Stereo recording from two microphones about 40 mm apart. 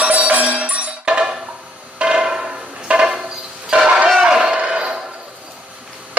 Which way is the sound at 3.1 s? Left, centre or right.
Centre.